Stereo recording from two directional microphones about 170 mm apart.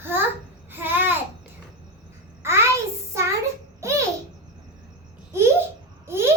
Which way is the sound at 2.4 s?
15° right (ahead or behind).